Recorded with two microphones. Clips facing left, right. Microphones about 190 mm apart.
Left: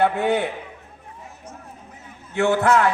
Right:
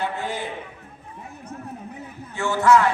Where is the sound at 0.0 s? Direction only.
65° left (ahead or behind).